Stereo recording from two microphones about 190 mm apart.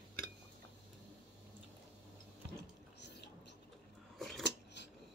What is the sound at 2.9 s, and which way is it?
Drip, 65° left (ahead or behind).